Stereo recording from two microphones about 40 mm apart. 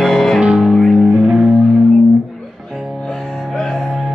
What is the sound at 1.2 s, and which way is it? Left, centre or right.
Music, centre.